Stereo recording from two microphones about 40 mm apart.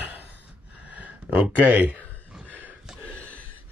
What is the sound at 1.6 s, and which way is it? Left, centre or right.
Speech, right.